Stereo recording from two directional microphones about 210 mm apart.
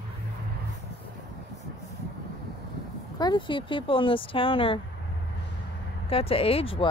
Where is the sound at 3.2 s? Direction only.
20° left (ahead or behind).